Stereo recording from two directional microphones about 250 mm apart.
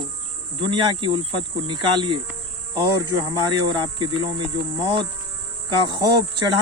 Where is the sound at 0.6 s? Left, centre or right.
Centre.